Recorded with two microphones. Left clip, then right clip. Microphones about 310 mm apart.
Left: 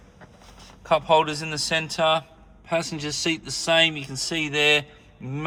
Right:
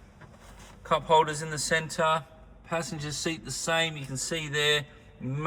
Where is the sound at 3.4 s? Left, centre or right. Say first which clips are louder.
Left 8 dB; centre.